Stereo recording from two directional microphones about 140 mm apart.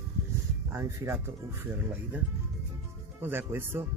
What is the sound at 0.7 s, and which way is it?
Speech, 20° right (ahead or behind).